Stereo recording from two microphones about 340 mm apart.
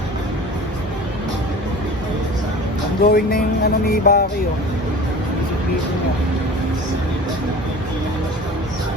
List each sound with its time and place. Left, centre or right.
3.0 s speech: left